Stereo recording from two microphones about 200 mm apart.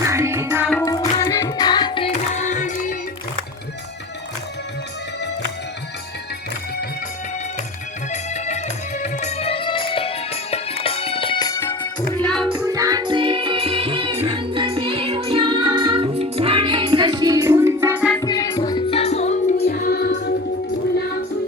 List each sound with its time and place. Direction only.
0.0 s music: 15° right (ahead or behind)
0.7 s music: 15° left (ahead or behind); by 2.7 s 40° left (ahead or behind)
8.1 s music: 35° left (ahead or behind); by 12.2 s 15° left (ahead or behind)
12.2 s music: 5° left (ahead or behind)
12.5 s music: 15° right (ahead or behind)
18.2 s music: 20° left (ahead or behind)
19.6 s music: 50° left (ahead or behind)